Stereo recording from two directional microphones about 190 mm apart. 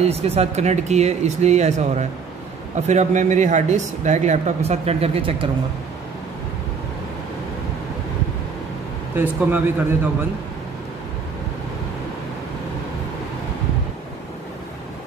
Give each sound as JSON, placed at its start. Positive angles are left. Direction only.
{"t": 0.0, "sound": "speech", "side_deg": -35}
{"t": 9.1, "sound": "speech", "side_deg": -10}